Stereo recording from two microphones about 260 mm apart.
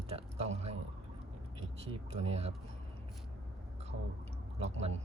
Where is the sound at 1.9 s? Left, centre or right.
Right.